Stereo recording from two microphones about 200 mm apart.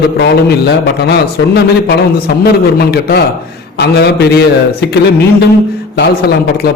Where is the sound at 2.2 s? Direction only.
50° left (ahead or behind).